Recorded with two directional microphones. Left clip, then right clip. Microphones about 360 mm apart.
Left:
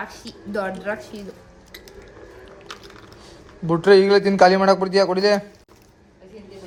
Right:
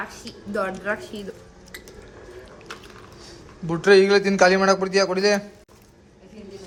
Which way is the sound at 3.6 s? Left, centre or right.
Centre.